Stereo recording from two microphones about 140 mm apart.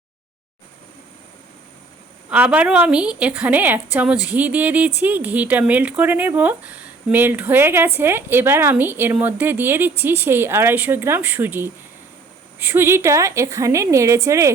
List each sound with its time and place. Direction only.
2.3 s a woman's voice: 10° right (ahead or behind)